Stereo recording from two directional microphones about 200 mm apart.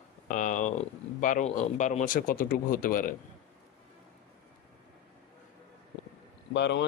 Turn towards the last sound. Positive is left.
turn(degrees=60)  # may be behind; listen again after turning